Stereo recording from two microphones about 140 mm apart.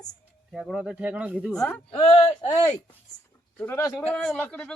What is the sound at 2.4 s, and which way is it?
Speech, 35° left (ahead or behind).